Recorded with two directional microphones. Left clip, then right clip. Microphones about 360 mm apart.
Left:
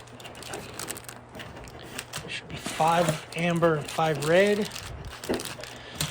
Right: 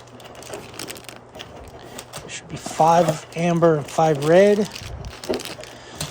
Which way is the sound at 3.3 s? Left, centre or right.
Centre.